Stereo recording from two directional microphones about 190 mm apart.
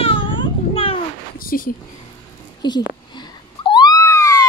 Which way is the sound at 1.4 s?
50° left (ahead or behind).